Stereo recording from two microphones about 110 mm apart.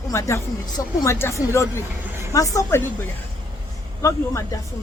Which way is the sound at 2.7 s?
25° left (ahead or behind).